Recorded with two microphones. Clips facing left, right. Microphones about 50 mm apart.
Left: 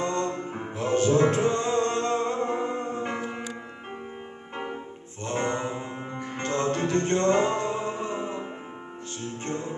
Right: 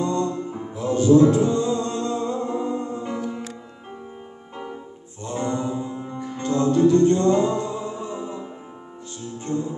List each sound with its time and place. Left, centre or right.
0.0 s music: left
5.2 s music: left